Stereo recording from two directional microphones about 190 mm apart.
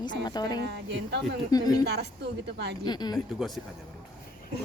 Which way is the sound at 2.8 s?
20° left (ahead or behind).